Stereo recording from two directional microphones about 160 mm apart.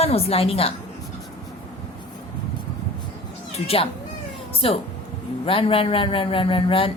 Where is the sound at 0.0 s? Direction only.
40° left (ahead or behind).